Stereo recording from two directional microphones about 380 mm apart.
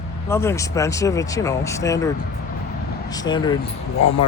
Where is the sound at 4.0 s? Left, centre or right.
Left.